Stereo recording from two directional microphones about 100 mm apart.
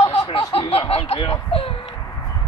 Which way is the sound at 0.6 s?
75° left (ahead or behind).